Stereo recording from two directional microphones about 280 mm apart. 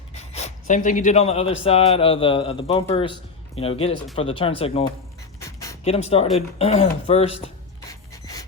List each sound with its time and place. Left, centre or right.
0.1 s speech: left
5.4 s a sound: centre
5.8 s speech: left
8.1 s rub: centre